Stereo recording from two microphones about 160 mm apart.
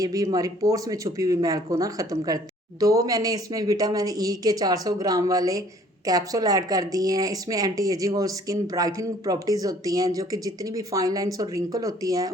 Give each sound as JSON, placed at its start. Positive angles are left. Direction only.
{"t": 0.0, "sound": "speech", "side_deg": -20}